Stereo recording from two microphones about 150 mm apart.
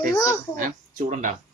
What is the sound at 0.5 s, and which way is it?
Speech, 65° right (ahead or behind).